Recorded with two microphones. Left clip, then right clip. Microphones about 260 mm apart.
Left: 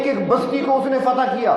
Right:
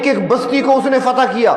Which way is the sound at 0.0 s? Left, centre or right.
Right.